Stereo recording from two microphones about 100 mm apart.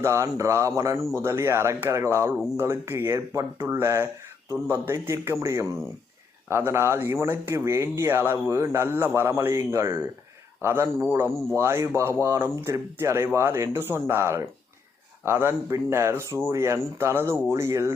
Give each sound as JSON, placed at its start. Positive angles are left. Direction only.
{"t": 0.0, "sound": "a man's voice", "side_deg": -30}